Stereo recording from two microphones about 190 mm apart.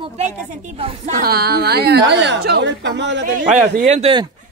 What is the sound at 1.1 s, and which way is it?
A woman's voice, 55° right (ahead or behind).